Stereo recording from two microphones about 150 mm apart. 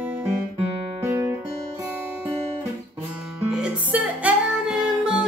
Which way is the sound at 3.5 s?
5° right (ahead or behind).